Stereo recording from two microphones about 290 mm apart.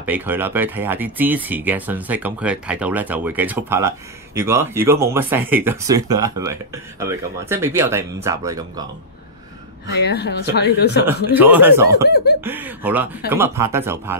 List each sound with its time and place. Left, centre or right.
0.0 s speech: centre
9.9 s speech: left
11.3 s speech: centre
11.9 s speech: left
12.4 s speech: centre